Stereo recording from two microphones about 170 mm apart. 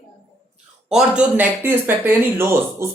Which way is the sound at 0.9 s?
5° right (ahead or behind).